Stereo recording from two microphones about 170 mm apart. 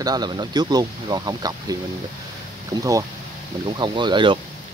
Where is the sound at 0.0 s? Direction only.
25° right (ahead or behind).